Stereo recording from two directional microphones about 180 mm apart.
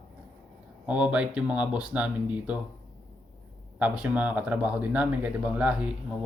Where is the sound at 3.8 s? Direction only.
5° right (ahead or behind).